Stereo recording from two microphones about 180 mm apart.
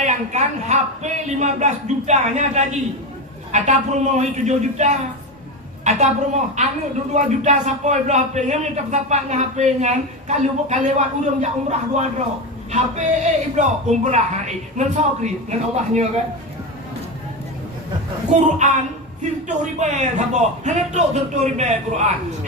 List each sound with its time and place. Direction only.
0.0 s a man's voice: 40° right (ahead or behind)
18.3 s a man's voice: 40° right (ahead or behind)
19.8 s a man's voice: 40° right (ahead or behind)